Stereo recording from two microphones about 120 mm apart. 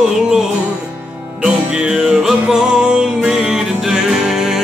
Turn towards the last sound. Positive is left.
turn(degrees=-5)  # may be behind; listen again after turning